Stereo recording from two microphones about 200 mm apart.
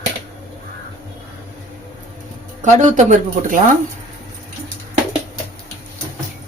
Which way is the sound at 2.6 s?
35° right (ahead or behind).